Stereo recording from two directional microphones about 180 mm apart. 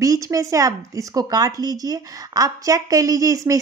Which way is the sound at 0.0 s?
20° right (ahead or behind).